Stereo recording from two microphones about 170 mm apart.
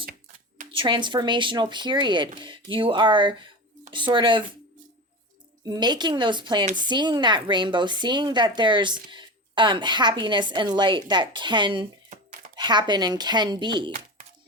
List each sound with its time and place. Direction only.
0.7 s a woman's voice: 30° right (ahead or behind)
5.6 s a woman's voice: 25° right (ahead or behind)
12.1 s a sound: 45° right (ahead or behind)
12.5 s a woman's voice: 25° right (ahead or behind)